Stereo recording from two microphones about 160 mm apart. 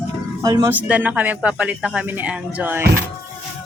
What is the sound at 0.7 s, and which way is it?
Speech, 10° right (ahead or behind).